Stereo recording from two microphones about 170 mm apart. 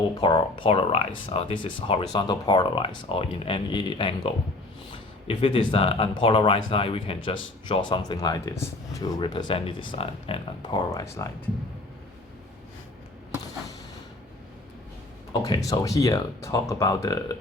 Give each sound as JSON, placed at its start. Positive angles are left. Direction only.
{"t": 0.2, "sound": "speech", "side_deg": 30}
{"t": 15.3, "sound": "speech", "side_deg": 25}